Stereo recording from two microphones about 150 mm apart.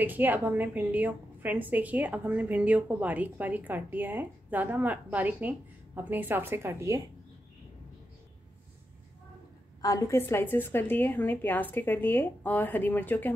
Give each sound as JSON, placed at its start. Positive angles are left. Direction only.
{"t": 0.0, "sound": "a woman's voice", "side_deg": -10}
{"t": 9.8, "sound": "a woman's voice", "side_deg": 25}